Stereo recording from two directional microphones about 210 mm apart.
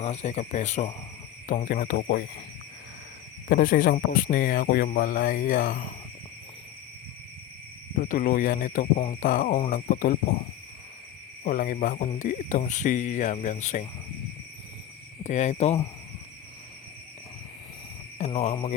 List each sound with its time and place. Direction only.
0.0 s speech: 35° left (ahead or behind)
3.5 s speech: 40° left (ahead or behind)
7.9 s speech: 40° left (ahead or behind)
11.4 s speech: 40° left (ahead or behind)
15.2 s speech: 35° left (ahead or behind)
18.3 s speech: 25° left (ahead or behind)